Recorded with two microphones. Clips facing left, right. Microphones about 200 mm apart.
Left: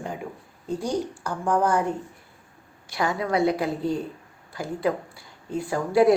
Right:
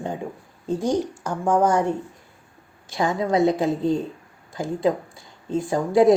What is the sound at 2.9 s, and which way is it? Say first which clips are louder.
A woman's voice: right 3 dB; 20° right (ahead or behind).